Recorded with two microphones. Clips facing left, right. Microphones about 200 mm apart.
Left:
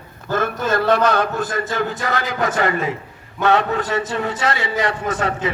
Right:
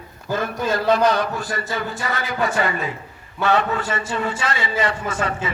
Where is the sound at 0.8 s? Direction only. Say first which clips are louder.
Left 1 dB; 55° left (ahead or behind).